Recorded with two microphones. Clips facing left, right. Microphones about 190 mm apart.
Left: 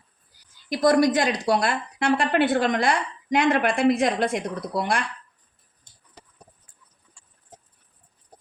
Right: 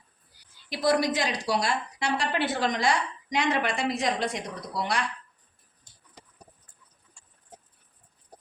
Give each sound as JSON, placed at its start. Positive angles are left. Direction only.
{"t": 0.7, "sound": "a woman's voice", "side_deg": 50}